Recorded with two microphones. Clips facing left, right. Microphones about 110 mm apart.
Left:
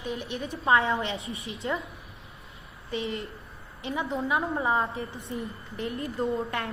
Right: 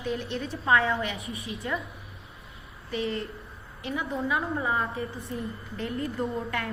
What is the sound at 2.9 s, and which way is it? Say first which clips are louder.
A woman's voice: right 2 dB; 20° left (ahead or behind).